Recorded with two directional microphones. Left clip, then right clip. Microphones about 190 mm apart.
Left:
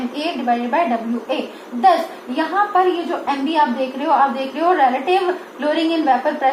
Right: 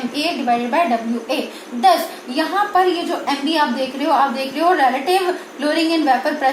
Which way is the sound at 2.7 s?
25° right (ahead or behind).